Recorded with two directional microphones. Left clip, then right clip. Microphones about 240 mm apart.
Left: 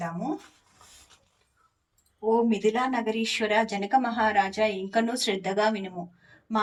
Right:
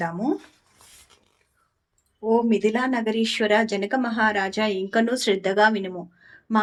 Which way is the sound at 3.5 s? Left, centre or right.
Centre.